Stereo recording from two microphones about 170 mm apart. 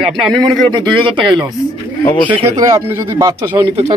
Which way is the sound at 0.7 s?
30° right (ahead or behind).